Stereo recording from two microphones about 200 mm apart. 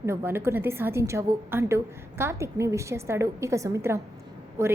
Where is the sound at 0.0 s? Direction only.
10° right (ahead or behind).